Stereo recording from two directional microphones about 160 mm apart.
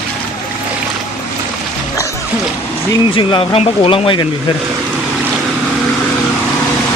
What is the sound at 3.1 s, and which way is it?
Speech, 30° left (ahead or behind).